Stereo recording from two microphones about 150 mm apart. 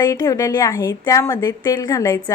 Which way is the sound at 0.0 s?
25° left (ahead or behind).